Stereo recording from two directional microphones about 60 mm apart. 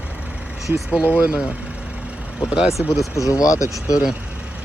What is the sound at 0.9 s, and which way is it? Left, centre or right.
Speech, right.